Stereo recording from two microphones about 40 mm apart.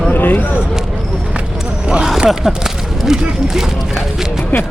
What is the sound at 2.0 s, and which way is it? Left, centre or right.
Speech, centre.